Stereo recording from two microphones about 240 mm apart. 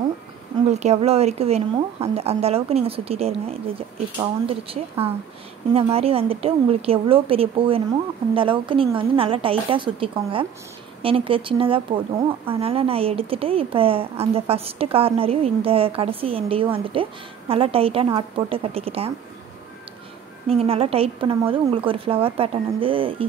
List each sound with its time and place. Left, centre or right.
0.7 s speech: right
20.4 s speech: right